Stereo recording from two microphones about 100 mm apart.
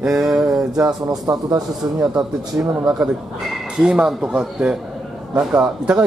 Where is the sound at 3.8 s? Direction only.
10° right (ahead or behind).